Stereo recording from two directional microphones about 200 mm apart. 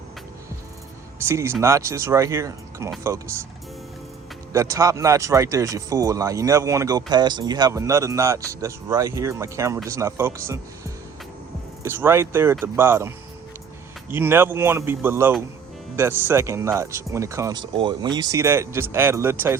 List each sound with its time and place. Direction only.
1.3 s speech: 15° right (ahead or behind)
4.5 s speech: 15° right (ahead or behind)